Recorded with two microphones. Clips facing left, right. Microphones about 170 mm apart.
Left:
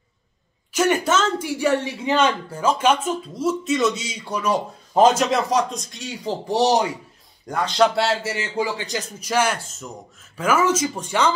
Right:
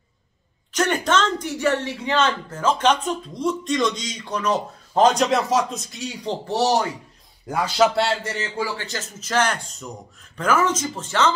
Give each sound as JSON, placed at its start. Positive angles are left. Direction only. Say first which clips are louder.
{"t": 0.7, "sound": "speech", "louder": "left 1 dB", "side_deg": 10}
{"t": 6.4, "sound": "speech", "louder": "left 2 dB", "side_deg": 15}
{"t": 7.4, "sound": "a man's voice", "louder": "even", "side_deg": -5}
{"t": 8.5, "sound": "speech", "louder": "left 3 dB", "side_deg": 20}